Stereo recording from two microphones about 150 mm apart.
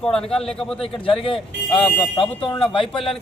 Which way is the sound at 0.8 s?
35° left (ahead or behind).